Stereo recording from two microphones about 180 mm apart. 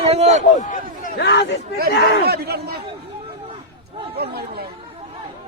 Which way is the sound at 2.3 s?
65° right (ahead or behind).